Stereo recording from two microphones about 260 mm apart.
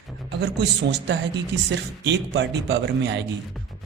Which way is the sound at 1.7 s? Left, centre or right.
Right.